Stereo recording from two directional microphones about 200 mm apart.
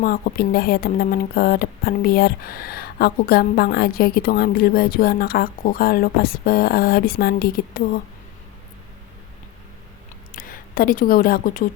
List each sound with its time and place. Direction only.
0.0 s speech: 45° left (ahead or behind)
10.3 s speech: 45° left (ahead or behind)